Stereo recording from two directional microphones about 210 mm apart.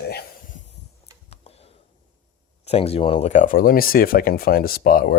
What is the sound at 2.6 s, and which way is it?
Speech, 30° left (ahead or behind).